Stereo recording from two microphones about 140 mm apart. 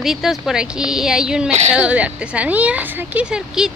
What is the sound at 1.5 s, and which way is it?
Speech, 55° right (ahead or behind).